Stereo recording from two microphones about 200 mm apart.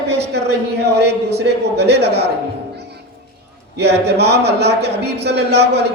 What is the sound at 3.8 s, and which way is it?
A man's voice, 55° right (ahead or behind).